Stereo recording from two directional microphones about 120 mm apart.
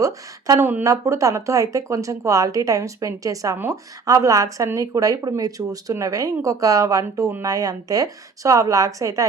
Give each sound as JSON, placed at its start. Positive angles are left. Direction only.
{"t": 0.0, "sound": "speech", "side_deg": -30}
{"t": 0.6, "sound": "speech", "side_deg": -15}
{"t": 0.9, "sound": "speech", "side_deg": -25}